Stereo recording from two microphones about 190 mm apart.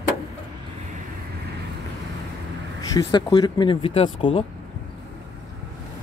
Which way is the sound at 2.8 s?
20° left (ahead or behind).